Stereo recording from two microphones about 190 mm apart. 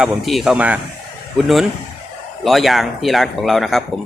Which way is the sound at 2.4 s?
Centre (ahead or behind).